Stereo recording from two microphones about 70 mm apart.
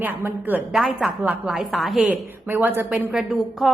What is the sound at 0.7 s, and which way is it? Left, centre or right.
A woman's voice, centre.